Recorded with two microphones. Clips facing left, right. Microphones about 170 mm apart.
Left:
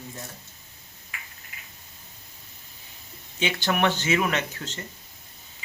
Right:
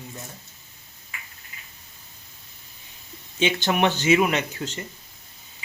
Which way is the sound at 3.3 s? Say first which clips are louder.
Right 3 dB; 20° right (ahead or behind).